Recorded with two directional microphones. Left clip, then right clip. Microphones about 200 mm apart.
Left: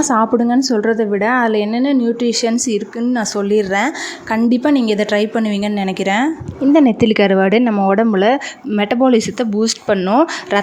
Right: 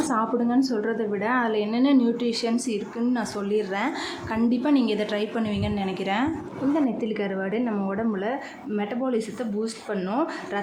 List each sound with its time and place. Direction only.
0.0 s a woman's voice: 40° left (ahead or behind)